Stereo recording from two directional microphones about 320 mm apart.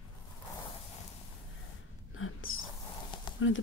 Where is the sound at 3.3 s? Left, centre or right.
Left.